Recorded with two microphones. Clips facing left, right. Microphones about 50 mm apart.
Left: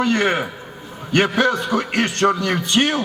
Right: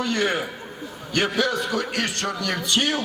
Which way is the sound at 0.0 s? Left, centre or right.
Left.